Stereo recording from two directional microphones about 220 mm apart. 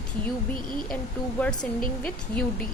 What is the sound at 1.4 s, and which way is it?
Speech, 5° left (ahead or behind).